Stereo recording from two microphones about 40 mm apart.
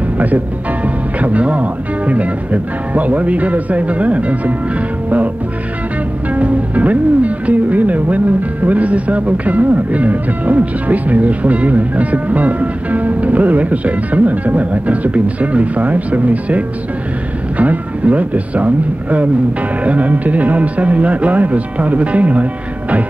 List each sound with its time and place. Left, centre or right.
1.2 s speech: right
6.3 s speech: right